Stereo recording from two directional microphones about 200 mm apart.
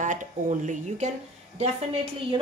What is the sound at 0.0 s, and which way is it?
A woman's voice, 40° right (ahead or behind).